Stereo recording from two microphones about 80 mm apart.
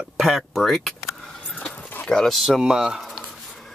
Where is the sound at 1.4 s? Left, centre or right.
Centre.